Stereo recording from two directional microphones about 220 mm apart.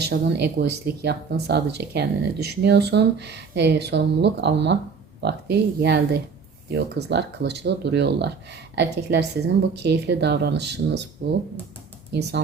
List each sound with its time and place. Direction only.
0.1 s speech: 50° right (ahead or behind)